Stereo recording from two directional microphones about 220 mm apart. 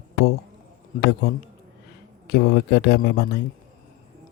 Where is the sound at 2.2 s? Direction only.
50° left (ahead or behind).